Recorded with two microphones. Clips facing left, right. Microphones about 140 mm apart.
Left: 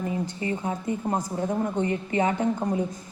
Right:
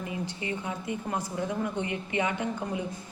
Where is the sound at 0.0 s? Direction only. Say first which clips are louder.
Left 6 dB; 40° left (ahead or behind).